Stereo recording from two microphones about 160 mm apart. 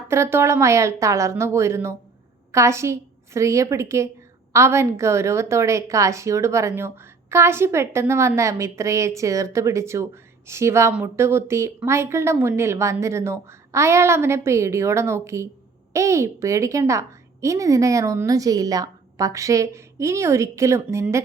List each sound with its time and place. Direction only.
0.1 s a woman's voice: 15° right (ahead or behind)